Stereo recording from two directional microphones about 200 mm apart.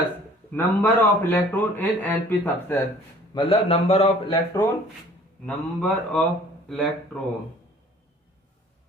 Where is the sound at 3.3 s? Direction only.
25° left (ahead or behind).